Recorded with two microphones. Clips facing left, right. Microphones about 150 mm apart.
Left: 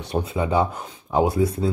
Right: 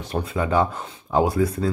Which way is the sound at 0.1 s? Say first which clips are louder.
Even; 15° left (ahead or behind).